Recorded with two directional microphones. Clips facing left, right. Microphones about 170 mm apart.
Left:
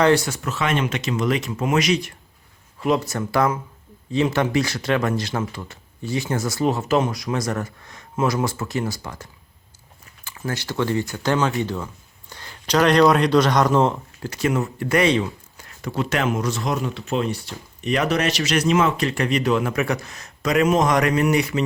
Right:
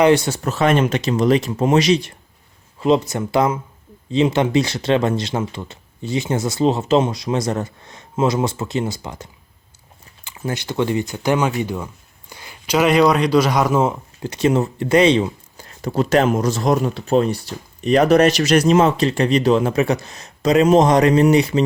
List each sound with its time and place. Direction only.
0.0 s speech: 20° right (ahead or behind)
0.3 s speech: 40° right (ahead or behind); by 14.0 s 5° right (ahead or behind)
14.2 s speech: 20° right (ahead or behind)